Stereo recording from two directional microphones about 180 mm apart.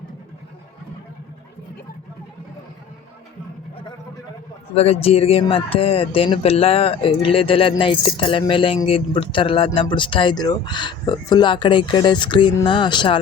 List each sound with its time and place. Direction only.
4.7 s speech: 35° left (ahead or behind)